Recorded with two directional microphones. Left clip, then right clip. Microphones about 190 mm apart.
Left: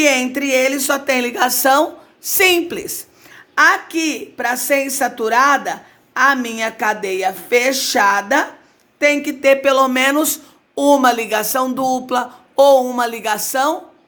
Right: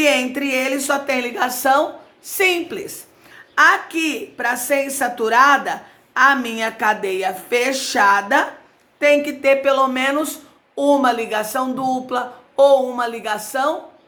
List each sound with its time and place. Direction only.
0.0 s speech: 40° left (ahead or behind)